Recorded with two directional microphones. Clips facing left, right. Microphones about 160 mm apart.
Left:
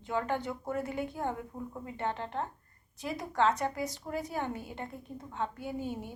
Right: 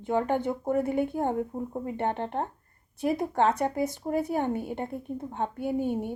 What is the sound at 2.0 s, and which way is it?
A woman's voice, 55° right (ahead or behind).